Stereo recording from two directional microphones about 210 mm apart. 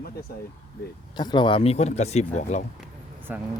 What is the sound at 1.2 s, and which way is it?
Speech, 20° left (ahead or behind).